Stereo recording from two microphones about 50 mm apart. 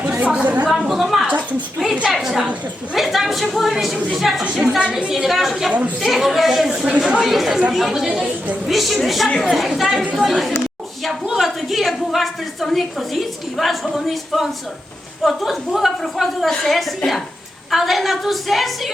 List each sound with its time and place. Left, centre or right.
0.3 s a woman's voice: right
0.7 s a woman's voice: centre
4.8 s a woman's voice: right
5.1 s a woman's voice: centre